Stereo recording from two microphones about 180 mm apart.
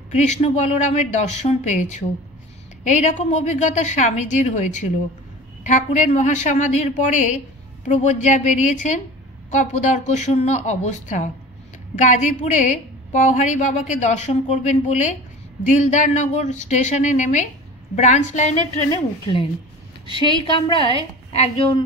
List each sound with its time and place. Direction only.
0.1 s a woman's voice: 40° left (ahead or behind)
20.1 s a woman's voice: 30° left (ahead or behind)